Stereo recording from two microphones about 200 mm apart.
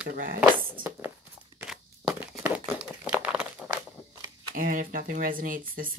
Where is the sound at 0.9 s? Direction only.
10° right (ahead or behind).